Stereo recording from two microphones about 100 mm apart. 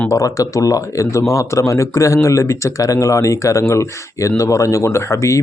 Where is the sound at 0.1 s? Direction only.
35° left (ahead or behind).